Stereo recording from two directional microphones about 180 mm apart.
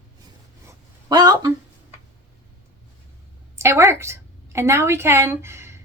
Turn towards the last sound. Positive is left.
turn(degrees=-15)  # may be behind; listen again after turning